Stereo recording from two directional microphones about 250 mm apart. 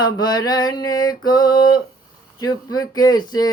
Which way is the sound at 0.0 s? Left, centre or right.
Centre.